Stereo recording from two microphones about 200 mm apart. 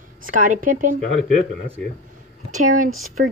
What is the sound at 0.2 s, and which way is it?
Speech, 40° right (ahead or behind).